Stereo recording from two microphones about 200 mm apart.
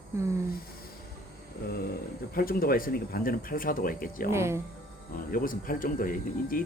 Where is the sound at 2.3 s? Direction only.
45° left (ahead or behind).